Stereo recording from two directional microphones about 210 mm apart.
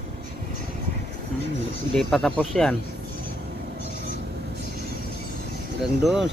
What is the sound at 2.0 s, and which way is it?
Speech, centre (ahead or behind).